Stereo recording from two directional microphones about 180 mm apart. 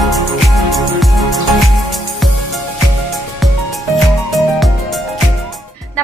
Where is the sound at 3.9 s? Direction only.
Centre (ahead or behind).